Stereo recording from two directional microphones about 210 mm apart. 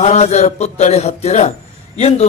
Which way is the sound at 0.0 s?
30° left (ahead or behind).